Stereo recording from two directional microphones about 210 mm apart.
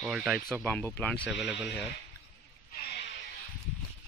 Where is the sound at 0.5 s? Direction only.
5° left (ahead or behind).